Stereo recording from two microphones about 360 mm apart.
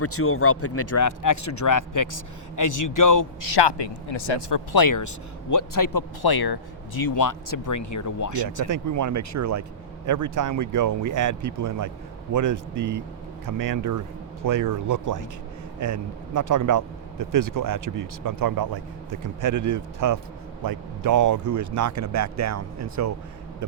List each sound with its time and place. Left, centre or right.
0.0 s speech: left
4.4 s a man's voice: left
7.1 s speech: left
8.6 s speech: right